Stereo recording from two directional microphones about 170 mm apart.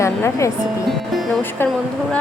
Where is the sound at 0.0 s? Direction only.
15° left (ahead or behind).